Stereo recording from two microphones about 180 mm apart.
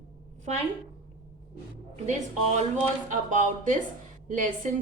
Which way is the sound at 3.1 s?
45° right (ahead or behind).